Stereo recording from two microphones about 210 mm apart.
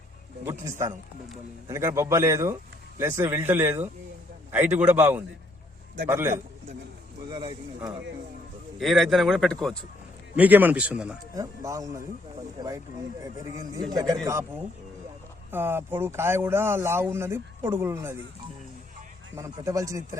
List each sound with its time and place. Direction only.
0.4 s speech: 10° right (ahead or behind)
8.8 s a man's voice: centre (ahead or behind)
10.3 s speech: 10° right (ahead or behind)
11.3 s speech: 15° right (ahead or behind)
13.2 s speech: 15° right (ahead or behind)
15.5 s speech: 10° right (ahead or behind)
19.4 s speech: 15° right (ahead or behind)